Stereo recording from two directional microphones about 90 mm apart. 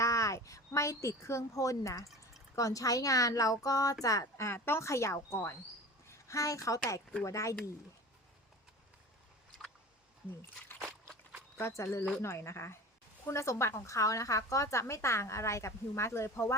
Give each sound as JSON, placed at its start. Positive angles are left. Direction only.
{"t": 0.0, "sound": "a woman's voice", "side_deg": 35}
{"t": 10.8, "sound": "a sound", "side_deg": -30}
{"t": 11.5, "sound": "a woman's voice", "side_deg": 30}